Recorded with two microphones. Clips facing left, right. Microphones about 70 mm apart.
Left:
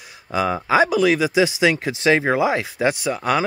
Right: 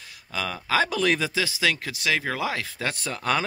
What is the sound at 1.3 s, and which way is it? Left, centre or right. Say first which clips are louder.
Speech: left 8 dB; left.